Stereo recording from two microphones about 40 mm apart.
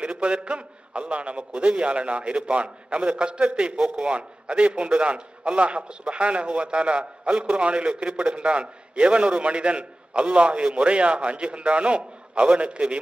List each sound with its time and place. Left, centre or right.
0.0 s a man's voice: right
4.0 s a man's voice: right